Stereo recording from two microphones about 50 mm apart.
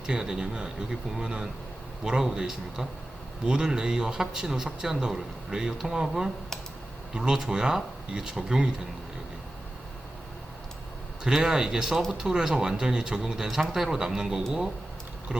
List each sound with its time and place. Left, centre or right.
0.1 s speech: centre
11.4 s speech: centre